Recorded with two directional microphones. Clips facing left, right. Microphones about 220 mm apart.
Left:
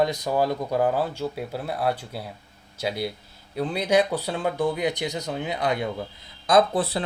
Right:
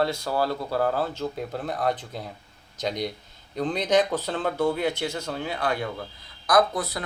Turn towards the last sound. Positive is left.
turn(degrees=30)  # may be behind; listen again after turning